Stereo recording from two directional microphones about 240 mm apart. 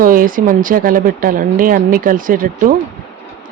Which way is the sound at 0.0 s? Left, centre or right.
Right.